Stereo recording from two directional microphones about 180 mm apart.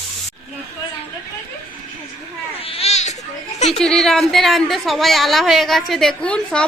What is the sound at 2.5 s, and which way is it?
A woman's voice, 30° left (ahead or behind).